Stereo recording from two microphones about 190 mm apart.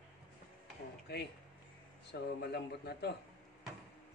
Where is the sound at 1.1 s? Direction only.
60° left (ahead or behind).